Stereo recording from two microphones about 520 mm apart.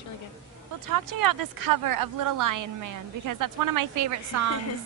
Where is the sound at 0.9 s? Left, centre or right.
Right.